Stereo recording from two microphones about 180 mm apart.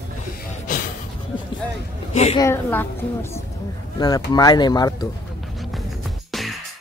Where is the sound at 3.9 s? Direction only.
20° left (ahead or behind).